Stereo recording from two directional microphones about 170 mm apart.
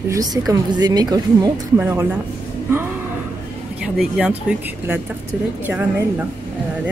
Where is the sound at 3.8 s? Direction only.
5° right (ahead or behind).